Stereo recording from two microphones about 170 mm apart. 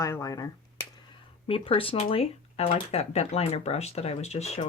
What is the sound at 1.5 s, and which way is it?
Speech, 30° left (ahead or behind).